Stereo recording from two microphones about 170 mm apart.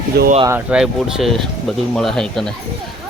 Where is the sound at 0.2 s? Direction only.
75° right (ahead or behind).